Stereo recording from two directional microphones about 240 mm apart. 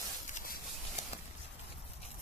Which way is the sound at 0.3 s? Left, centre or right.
Left.